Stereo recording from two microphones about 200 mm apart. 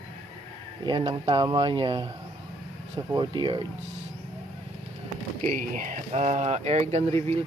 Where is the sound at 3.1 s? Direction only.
20° right (ahead or behind).